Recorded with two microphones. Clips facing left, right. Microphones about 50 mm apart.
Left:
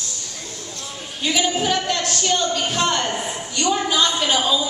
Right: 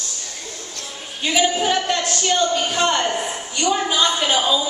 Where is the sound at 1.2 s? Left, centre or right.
Centre.